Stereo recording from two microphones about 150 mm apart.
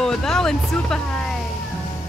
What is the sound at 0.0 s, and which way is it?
Speech, 5° left (ahead or behind).